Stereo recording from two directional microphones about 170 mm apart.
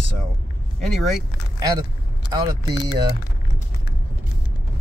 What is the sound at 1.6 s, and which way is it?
Speech, 20° right (ahead or behind).